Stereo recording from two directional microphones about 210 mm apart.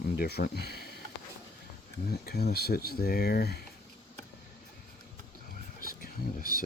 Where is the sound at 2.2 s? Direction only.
50° left (ahead or behind).